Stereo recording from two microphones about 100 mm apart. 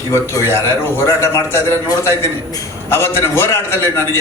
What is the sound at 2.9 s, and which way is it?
A man's voice, 25° left (ahead or behind).